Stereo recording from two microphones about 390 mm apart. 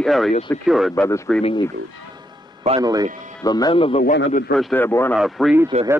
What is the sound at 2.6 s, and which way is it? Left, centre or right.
Speech, centre.